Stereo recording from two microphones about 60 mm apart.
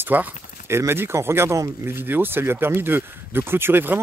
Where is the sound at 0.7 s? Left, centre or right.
Right.